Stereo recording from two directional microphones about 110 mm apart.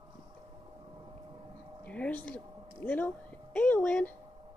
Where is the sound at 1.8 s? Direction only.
10° left (ahead or behind).